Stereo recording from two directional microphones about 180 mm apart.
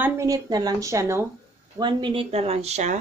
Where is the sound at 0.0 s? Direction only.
20° right (ahead or behind).